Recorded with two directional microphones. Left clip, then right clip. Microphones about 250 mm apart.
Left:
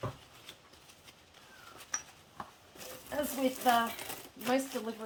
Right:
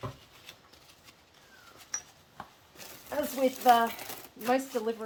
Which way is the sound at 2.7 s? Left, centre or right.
Centre.